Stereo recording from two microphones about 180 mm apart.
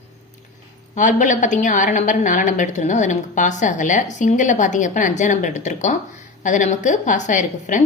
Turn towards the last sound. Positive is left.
turn(degrees=45)  # may be behind; listen again after turning